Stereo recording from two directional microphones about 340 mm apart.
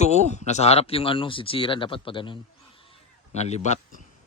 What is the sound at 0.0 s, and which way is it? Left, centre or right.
Speech, centre.